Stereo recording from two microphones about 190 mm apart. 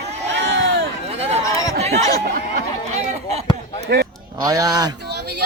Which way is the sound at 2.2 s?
50° right (ahead or behind).